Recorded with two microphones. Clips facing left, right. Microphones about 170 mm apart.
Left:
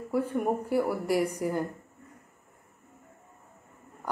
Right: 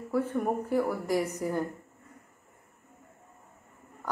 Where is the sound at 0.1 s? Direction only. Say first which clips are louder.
Left 1 dB; 10° left (ahead or behind).